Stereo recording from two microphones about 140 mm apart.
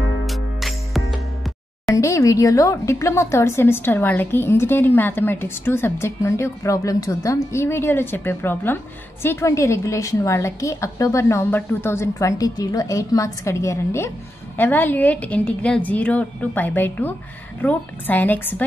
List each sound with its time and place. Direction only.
0.3 s music: centre (ahead or behind)
2.0 s a woman's voice: 25° left (ahead or behind)